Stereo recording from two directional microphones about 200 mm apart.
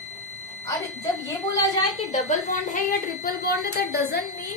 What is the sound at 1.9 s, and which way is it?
A woman's voice, 35° left (ahead or behind).